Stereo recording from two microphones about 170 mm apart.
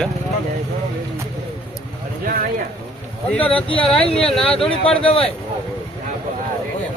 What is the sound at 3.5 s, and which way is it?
Speech, 30° left (ahead or behind).